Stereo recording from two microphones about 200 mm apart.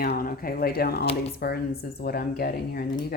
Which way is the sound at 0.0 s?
45° left (ahead or behind).